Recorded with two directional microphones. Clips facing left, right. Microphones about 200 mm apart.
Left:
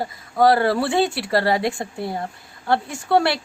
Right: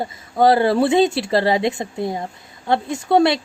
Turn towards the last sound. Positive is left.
turn(degrees=-20)  # may be behind; listen again after turning